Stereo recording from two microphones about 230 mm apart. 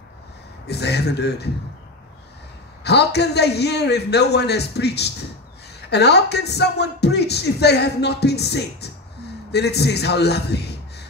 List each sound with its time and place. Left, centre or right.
0.7 s speech: left
2.8 s speech: left